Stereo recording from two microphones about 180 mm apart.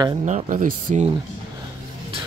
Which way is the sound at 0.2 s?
45° right (ahead or behind).